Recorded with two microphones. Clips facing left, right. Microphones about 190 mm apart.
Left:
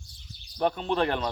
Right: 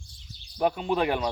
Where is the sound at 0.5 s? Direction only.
10° right (ahead or behind).